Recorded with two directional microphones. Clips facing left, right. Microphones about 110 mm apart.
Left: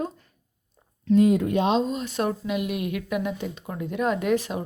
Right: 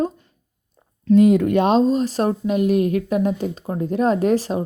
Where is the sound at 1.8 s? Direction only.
35° right (ahead or behind).